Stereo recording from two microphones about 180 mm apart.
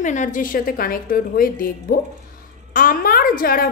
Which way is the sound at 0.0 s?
45° left (ahead or behind).